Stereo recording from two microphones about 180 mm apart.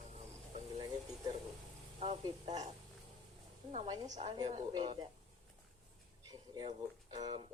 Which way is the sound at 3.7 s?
30° right (ahead or behind).